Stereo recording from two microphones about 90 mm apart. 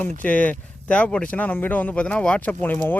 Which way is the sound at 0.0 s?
20° left (ahead or behind).